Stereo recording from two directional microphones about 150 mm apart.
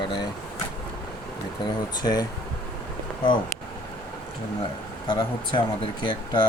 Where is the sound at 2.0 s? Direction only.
25° left (ahead or behind).